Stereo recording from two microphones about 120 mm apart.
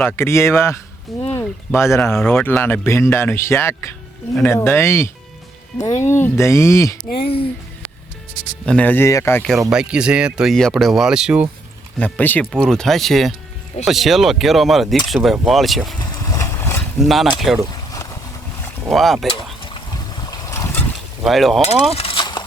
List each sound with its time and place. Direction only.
0.0 s speech: 20° left (ahead or behind)
7.2 s speech: 50° left (ahead or behind)
8.6 s speech: 10° left (ahead or behind)
9.6 s speech: 5° right (ahead or behind)
11.9 s speech: 10° left (ahead or behind)
12.7 s speech: 5° left (ahead or behind)
16.0 s vehicle: 30° left (ahead or behind)
17.0 s speech: centre (ahead or behind)
17.9 s a sound: 30° left (ahead or behind)
18.9 s speech: centre (ahead or behind)
19.3 s a sound: 45° left (ahead or behind); by 20.9 s 20° left (ahead or behind)
21.2 s speech: centre (ahead or behind)
21.9 s horse: 50° left (ahead or behind)